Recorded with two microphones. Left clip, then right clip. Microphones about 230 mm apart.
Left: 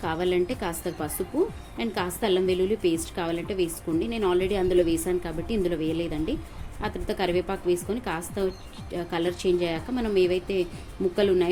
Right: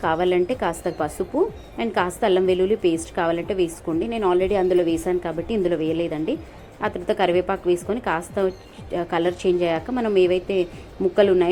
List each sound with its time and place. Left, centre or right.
0.0 s a woman's voice: centre